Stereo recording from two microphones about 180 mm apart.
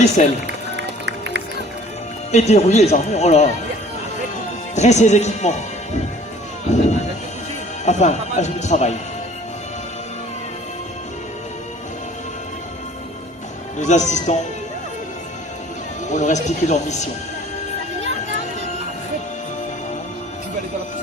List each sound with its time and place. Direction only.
2.3 s speech: 40° left (ahead or behind)
4.4 s music: 40° left (ahead or behind)
6.7 s speech: 40° left (ahead or behind)
13.7 s speech: 40° left (ahead or behind)
16.0 s speech: 40° left (ahead or behind)